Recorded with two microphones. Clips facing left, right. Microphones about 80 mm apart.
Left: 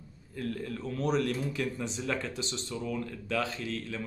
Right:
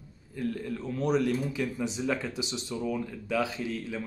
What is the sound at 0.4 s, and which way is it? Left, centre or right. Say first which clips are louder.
Speech: right 3 dB; centre.